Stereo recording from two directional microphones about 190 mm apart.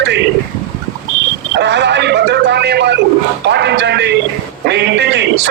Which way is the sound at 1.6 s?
65° right (ahead or behind).